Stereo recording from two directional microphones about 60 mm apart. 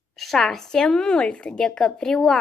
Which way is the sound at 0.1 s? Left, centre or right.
Centre.